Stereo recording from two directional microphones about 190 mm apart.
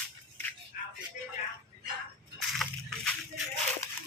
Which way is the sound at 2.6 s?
Centre (ahead or behind).